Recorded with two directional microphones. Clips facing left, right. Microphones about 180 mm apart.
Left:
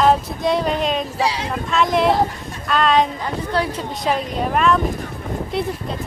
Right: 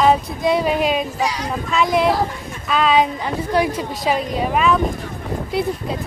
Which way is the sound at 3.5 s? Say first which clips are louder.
Right 4 dB; 15° right (ahead or behind).